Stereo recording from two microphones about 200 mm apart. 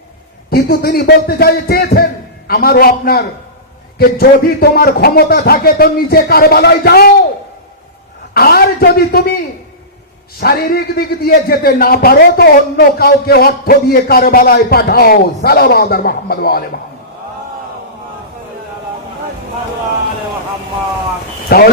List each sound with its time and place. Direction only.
0.5 s a man's voice: 50° left (ahead or behind)
8.3 s a man's voice: 50° left (ahead or behind)
10.4 s a man's voice: 50° left (ahead or behind)
21.5 s a man's voice: 50° left (ahead or behind)